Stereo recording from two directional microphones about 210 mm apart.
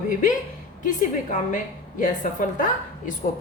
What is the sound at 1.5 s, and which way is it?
Speech, 35° left (ahead or behind).